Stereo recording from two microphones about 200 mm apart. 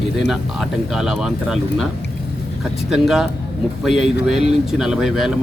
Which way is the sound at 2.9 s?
Centre (ahead or behind).